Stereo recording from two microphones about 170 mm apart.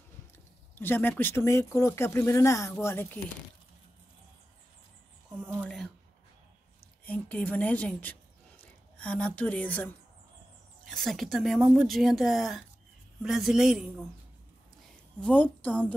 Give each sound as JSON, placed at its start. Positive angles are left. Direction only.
{"t": 0.7, "sound": "speech", "side_deg": 10}
{"t": 5.6, "sound": "a sound", "side_deg": 5}
{"t": 7.1, "sound": "speech", "side_deg": 10}
{"t": 15.1, "sound": "speech", "side_deg": 10}